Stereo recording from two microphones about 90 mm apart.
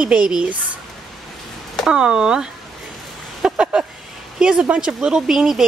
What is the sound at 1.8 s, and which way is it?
Speech, 10° right (ahead or behind).